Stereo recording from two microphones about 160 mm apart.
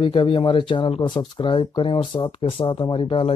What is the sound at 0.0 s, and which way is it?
Speech, 30° left (ahead or behind).